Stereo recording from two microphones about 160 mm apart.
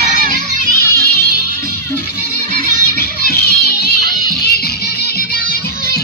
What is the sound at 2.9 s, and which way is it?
Music, 75° left (ahead or behind).